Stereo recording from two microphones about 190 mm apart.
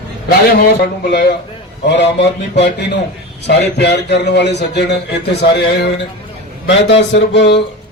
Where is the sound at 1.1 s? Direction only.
65° left (ahead or behind).